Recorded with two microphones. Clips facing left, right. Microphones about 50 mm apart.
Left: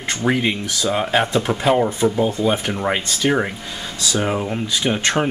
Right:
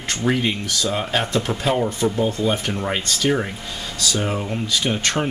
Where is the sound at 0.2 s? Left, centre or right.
Centre.